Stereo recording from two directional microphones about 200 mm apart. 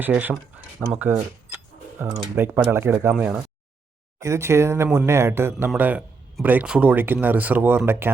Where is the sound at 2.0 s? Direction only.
20° right (ahead or behind).